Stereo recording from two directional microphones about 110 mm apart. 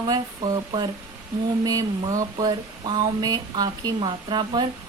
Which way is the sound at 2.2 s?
35° right (ahead or behind).